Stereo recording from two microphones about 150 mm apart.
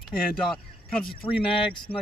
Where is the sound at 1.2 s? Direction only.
35° left (ahead or behind).